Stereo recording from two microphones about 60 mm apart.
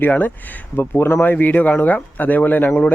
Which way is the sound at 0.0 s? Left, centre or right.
Left.